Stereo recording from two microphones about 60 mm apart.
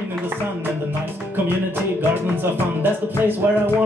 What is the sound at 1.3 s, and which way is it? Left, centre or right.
Music, right.